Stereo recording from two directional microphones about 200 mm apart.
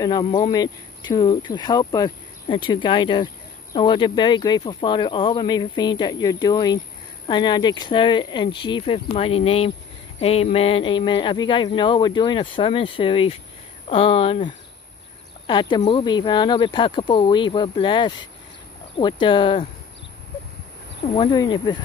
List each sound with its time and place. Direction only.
0.2 s speech: 25° left (ahead or behind)
21.1 s speech: 25° left (ahead or behind)